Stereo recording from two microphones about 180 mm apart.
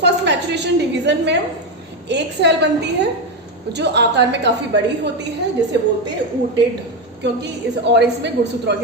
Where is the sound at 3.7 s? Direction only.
70° right (ahead or behind).